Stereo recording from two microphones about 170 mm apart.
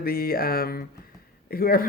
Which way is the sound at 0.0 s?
60° left (ahead or behind).